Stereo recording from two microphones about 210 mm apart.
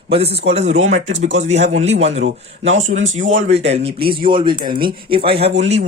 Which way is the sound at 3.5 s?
30° right (ahead or behind).